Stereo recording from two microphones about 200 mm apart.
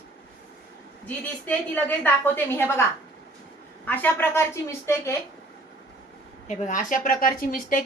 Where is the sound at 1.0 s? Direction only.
10° left (ahead or behind).